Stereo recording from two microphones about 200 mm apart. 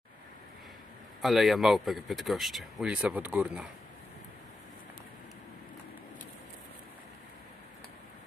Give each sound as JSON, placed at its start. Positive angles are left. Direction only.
{"t": 1.2, "sound": "speech", "side_deg": 0}